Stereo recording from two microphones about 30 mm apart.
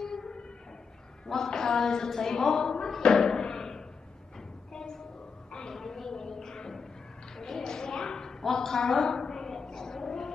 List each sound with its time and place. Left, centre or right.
0.0 s train: left
1.2 s a woman's voice: centre
3.0 s music: left
5.7 s a sound: centre